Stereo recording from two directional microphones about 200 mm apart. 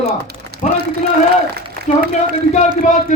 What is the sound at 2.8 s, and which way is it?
Speech, 35° left (ahead or behind).